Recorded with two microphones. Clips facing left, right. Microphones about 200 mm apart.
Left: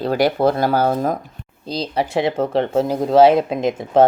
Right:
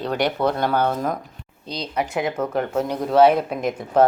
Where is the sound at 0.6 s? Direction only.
35° left (ahead or behind).